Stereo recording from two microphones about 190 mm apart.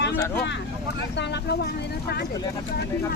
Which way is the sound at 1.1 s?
60° left (ahead or behind).